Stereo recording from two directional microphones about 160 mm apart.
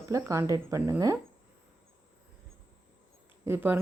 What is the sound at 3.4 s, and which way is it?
Speech, 15° right (ahead or behind).